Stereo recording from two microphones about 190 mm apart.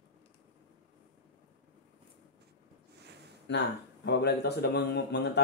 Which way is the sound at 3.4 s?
65° left (ahead or behind).